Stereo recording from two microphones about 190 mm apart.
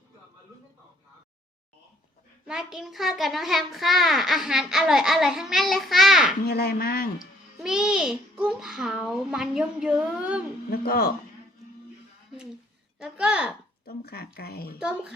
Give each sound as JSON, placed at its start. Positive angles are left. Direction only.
{"t": 2.5, "sound": "a child's voice", "side_deg": -5}
{"t": 6.4, "sound": "speech", "side_deg": 55}
{"t": 7.2, "sound": "a child's voice", "side_deg": -5}
{"t": 10.7, "sound": "speech", "side_deg": 55}
{"t": 13.0, "sound": "a child's voice", "side_deg": -5}
{"t": 13.8, "sound": "speech", "side_deg": 55}
{"t": 14.8, "sound": "a child's voice", "side_deg": -5}